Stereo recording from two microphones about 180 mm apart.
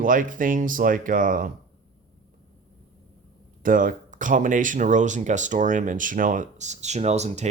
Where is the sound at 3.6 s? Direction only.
50° right (ahead or behind).